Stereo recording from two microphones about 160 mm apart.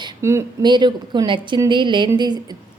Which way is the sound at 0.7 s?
30° right (ahead or behind).